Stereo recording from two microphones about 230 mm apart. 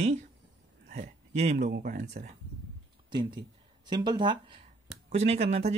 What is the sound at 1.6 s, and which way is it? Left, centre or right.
Speech, right.